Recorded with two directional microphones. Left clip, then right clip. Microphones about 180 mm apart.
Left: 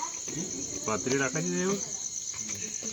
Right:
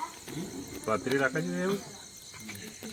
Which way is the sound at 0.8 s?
40° left (ahead or behind).